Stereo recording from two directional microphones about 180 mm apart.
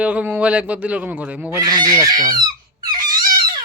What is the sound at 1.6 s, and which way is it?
Fowl, 20° right (ahead or behind).